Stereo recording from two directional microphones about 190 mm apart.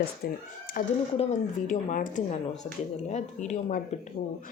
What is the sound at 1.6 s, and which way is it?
Speech, 45° left (ahead or behind).